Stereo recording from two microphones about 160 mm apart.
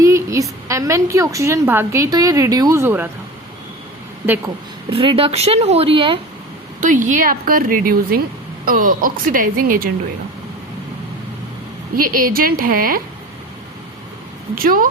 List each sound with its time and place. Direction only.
0.0 s a woman's voice: 20° right (ahead or behind)
4.9 s speech: 35° right (ahead or behind)
6.7 s speech: 55° right (ahead or behind)
11.9 s speech: 60° right (ahead or behind)
14.5 s speech: 60° right (ahead or behind)